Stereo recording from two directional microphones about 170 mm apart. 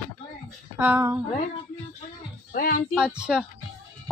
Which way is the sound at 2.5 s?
60° left (ahead or behind).